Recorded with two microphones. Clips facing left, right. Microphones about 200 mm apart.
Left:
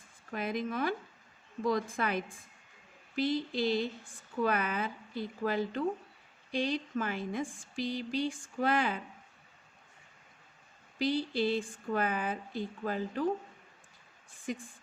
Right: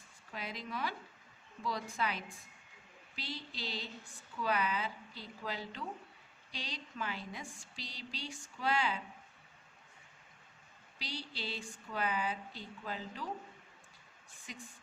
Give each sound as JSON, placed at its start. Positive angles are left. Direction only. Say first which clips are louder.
{"t": 0.3, "sound": "a woman's voice", "louder": "left 9 dB", "side_deg": 50}
{"t": 10.9, "sound": "a woman's voice", "louder": "left 15 dB", "side_deg": 50}
{"t": 14.5, "sound": "a woman's voice", "louder": "left 13 dB", "side_deg": 50}